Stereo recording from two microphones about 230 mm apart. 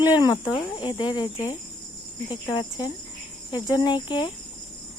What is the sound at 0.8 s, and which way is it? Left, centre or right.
Speech, left.